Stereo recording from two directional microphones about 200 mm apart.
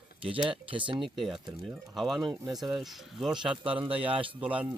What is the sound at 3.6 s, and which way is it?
Speech, 25° right (ahead or behind).